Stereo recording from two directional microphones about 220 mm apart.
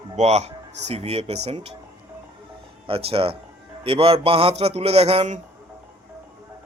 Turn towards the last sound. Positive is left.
turn(degrees=-30)  # may be behind; listen again after turning